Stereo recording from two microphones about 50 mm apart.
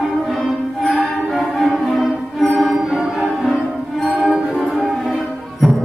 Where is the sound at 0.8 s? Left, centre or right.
Centre.